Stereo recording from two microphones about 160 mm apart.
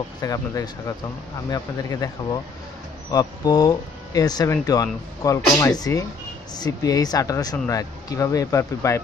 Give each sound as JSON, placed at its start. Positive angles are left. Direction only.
{"t": 0.2, "sound": "speech", "side_deg": 20}